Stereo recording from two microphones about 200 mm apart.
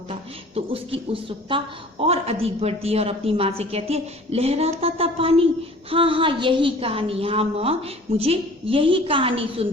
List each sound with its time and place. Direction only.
0.1 s a woman's voice: 30° right (ahead or behind)